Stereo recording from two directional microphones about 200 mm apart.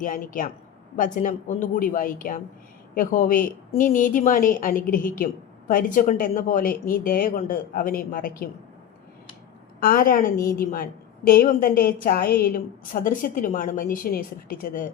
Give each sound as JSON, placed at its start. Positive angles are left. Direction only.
{"t": 0.0, "sound": "a woman's voice", "side_deg": 40}
{"t": 9.8, "sound": "a woman's voice", "side_deg": 45}